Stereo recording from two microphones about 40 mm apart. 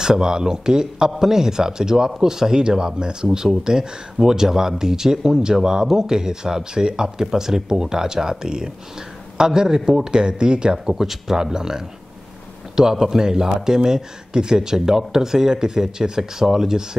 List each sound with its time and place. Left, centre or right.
0.0 s speech: centre
11.0 s speech: centre